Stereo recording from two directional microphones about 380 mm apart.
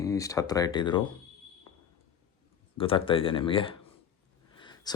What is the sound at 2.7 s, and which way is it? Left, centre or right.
Speech, centre.